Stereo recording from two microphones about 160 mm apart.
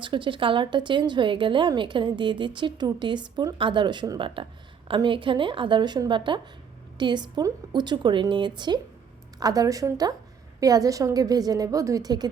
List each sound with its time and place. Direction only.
0.0 s a woman's voice: 30° right (ahead or behind)